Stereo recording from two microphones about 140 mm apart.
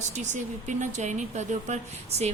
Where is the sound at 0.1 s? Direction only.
60° right (ahead or behind).